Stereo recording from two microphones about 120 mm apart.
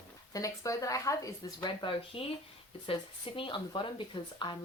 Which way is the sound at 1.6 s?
45° left (ahead or behind).